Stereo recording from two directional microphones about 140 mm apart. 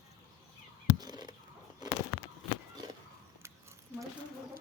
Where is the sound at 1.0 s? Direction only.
30° right (ahead or behind).